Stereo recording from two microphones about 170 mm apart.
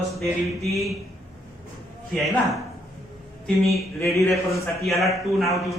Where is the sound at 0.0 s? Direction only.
Centre (ahead or behind).